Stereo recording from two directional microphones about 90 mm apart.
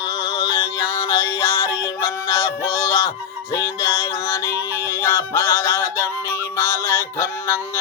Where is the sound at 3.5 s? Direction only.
30° left (ahead or behind).